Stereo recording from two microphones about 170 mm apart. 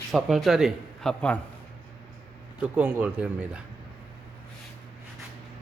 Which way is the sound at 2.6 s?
10° right (ahead or behind).